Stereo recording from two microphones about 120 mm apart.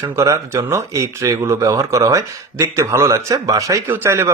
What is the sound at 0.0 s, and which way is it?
Speech, 25° right (ahead or behind).